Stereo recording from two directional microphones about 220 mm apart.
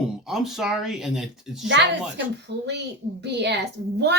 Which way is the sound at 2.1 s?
50° right (ahead or behind).